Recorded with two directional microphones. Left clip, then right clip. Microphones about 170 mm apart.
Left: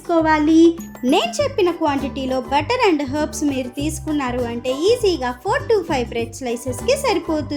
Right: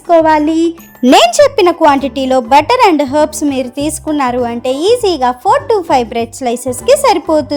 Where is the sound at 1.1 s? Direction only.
65° right (ahead or behind).